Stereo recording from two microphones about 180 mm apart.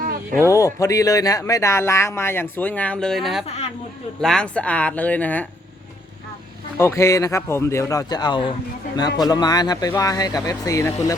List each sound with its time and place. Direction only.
0.0 s a sound: 50° right (ahead or behind)
0.4 s speech: 15° left (ahead or behind); by 3.4 s centre (ahead or behind)
3.4 s speech: 35° left (ahead or behind)
4.2 s speech: 5° left (ahead or behind)
6.7 s speech: 15° left (ahead or behind)